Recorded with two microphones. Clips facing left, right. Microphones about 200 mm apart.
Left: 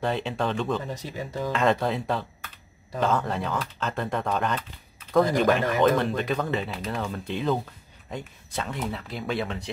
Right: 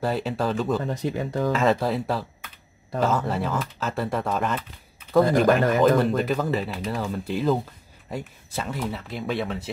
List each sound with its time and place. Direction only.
0.0 s speech: 5° right (ahead or behind)
0.8 s speech: 55° right (ahead or behind)
1.5 s speech: centre (ahead or behind)